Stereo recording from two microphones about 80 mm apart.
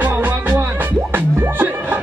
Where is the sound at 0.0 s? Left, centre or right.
Right.